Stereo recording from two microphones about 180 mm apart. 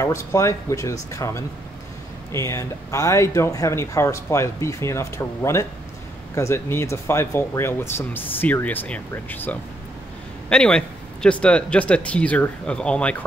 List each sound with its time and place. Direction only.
0.0 s speech: 15° left (ahead or behind)